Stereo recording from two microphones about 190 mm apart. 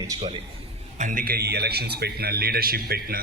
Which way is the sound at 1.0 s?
45° right (ahead or behind).